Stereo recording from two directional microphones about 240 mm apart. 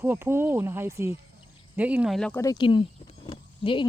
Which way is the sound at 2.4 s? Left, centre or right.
Centre.